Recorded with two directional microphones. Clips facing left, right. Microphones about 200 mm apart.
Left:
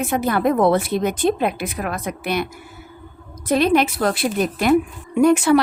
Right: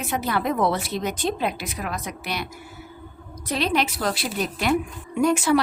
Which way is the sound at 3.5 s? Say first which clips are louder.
Left 7 dB; 50° left (ahead or behind).